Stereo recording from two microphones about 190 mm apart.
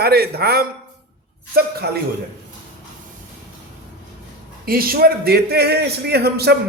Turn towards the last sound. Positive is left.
turn(degrees=-55)  # may be behind; listen again after turning